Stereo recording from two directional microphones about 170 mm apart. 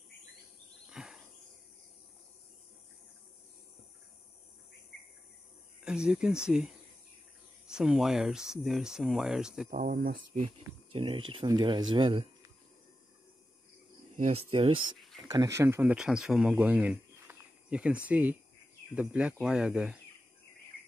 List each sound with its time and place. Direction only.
0.8 s a sound: 5° right (ahead or behind)
5.9 s speech: 5° right (ahead or behind)
9.7 s speech: 55° right (ahead or behind)
11.0 s speech: 30° right (ahead or behind)
14.1 s speech: 40° right (ahead or behind)
15.0 s a sound: centre (ahead or behind)
15.2 s speech: 20° right (ahead or behind)